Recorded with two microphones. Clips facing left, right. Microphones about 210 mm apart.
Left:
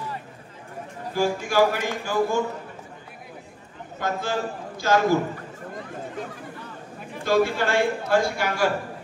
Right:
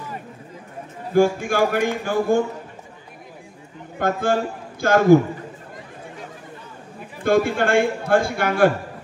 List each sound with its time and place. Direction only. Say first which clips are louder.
1.1 s a man's voice: right 5 dB; 55° right (ahead or behind)
4.0 s a man's voice: right 6 dB; 55° right (ahead or behind)
7.2 s a man's voice: right 3 dB; 55° right (ahead or behind)